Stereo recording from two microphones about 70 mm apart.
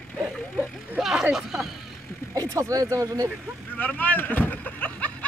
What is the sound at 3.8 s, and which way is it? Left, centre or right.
Vehicle, left.